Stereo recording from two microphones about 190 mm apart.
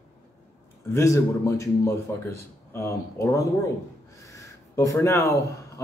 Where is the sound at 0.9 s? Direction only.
15° left (ahead or behind).